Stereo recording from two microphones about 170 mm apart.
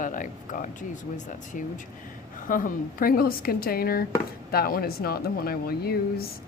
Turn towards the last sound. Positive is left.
turn(degrees=65)  # may be behind; listen again after turning